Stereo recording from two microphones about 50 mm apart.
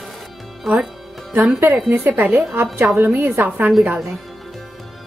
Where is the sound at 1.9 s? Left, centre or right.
Right.